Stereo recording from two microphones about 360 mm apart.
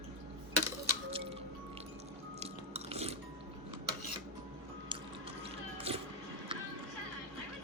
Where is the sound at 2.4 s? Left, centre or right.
Centre.